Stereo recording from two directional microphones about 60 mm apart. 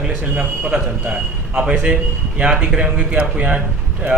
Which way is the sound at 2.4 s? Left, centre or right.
Centre.